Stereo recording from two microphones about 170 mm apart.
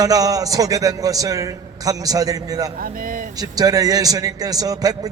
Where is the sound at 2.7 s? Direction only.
55° right (ahead or behind).